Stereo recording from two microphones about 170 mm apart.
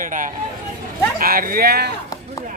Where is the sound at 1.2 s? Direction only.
60° right (ahead or behind).